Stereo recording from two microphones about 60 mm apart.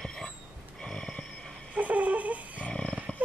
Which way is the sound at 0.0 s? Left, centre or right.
Centre.